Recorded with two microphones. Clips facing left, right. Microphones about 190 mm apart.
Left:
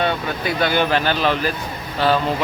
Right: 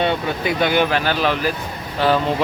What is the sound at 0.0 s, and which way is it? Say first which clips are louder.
Speech: right 2 dB; 20° right (ahead or behind).